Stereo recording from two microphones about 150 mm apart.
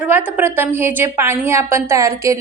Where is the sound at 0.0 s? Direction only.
10° right (ahead or behind).